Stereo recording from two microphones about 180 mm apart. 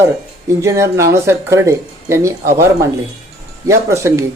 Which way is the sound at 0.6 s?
15° right (ahead or behind).